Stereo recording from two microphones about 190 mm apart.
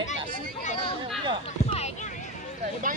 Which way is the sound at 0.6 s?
40° left (ahead or behind).